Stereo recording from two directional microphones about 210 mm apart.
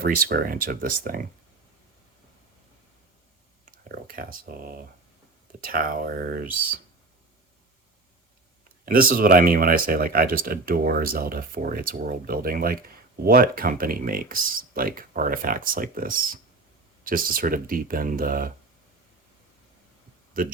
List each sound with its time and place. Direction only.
0.3 s speech: 45° right (ahead or behind)
3.7 s speech: 45° right (ahead or behind)
8.8 s speech: 45° right (ahead or behind)
20.4 s speech: 45° right (ahead or behind)